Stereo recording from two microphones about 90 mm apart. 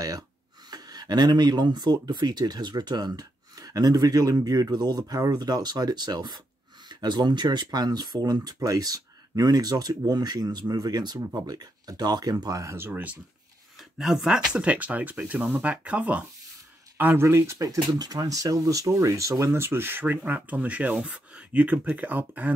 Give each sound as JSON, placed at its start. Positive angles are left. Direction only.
{"t": 0.7, "sound": "speech", "side_deg": -50}
{"t": 13.7, "sound": "speech", "side_deg": 0}